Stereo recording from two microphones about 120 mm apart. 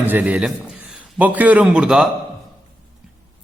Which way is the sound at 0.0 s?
15° right (ahead or behind).